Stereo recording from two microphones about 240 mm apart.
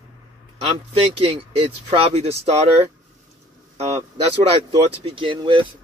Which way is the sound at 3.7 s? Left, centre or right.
Right.